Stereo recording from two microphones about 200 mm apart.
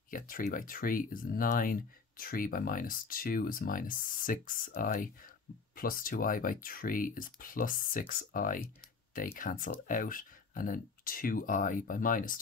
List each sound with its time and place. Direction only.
0.1 s speech: 40° left (ahead or behind)